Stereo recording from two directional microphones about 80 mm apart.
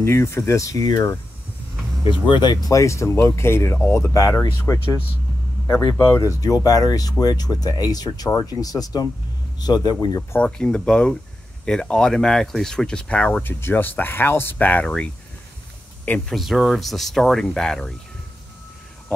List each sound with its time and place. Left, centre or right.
0.0 s speech: left
2.0 s speech: left
2.7 s speech: left
6.4 s speech: left
10.4 s speech: centre
16.3 s speech: centre